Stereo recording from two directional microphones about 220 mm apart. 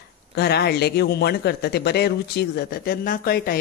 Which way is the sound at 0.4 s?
45° left (ahead or behind).